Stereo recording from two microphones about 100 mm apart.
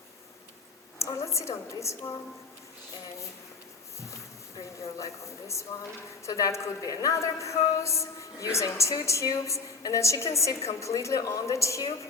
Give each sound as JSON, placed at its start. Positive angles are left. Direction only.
{"t": 0.9, "sound": "a woman's voice", "side_deg": 30}
{"t": 4.9, "sound": "a woman's voice", "side_deg": 30}